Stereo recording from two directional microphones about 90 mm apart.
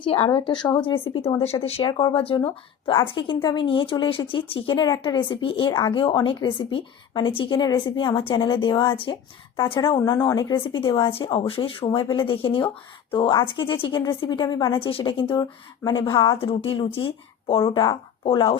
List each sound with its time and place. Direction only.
0.0 s a woman's voice: 80° left; by 0.8 s 55° left (ahead or behind)
1.0 s speech: 90° left
2.1 s a woman's voice: 75° left (ahead or behind); by 7.8 s 55° left (ahead or behind)
7.9 s a woman's voice: 65° left (ahead or behind); by 8.4 s 85° left
8.4 s a woman's voice: 65° left (ahead or behind); by 11.9 s 85° left
11.9 s a woman's voice: 65° left (ahead or behind)
16.4 s speech: 90° left; by 17.1 s 75° left (ahead or behind)
18.3 s a woman's voice: 65° left (ahead or behind)